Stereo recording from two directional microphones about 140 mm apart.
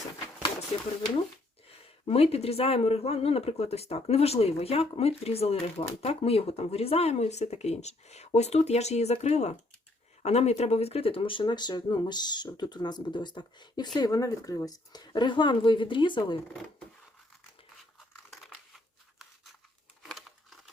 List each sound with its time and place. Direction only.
1.6 s speech: 45° left (ahead or behind)
18.3 s a sound: centre (ahead or behind)
20.0 s crumpling: centre (ahead or behind)